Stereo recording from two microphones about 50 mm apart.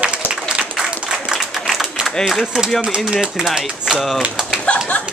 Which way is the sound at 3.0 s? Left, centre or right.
Centre.